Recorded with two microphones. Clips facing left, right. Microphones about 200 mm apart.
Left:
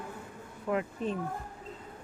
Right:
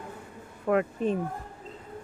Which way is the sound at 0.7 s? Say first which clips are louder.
Right 6 dB; 60° right (ahead or behind).